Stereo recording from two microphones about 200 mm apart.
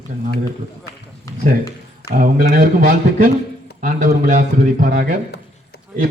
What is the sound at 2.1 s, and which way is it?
Speech, 45° right (ahead or behind).